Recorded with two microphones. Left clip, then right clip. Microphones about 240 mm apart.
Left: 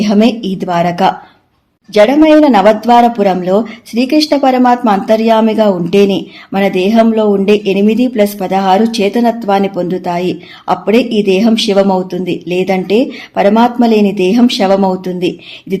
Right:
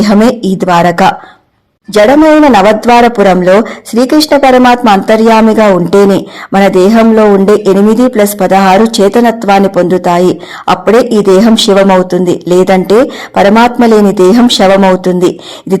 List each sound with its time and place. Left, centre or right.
0.1 s speech: right